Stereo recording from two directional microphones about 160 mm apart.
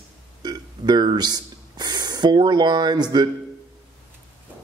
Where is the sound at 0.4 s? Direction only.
25° right (ahead or behind).